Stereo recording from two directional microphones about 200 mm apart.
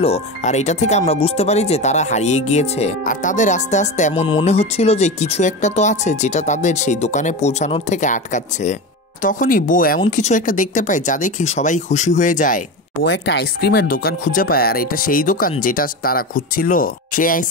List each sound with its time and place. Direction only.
0.0 s speech: 35° left (ahead or behind)
13.0 s speech: 60° left (ahead or behind); by 17.5 s 40° left (ahead or behind)